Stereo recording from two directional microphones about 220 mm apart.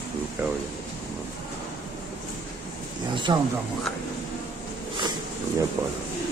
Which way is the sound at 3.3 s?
20° right (ahead or behind).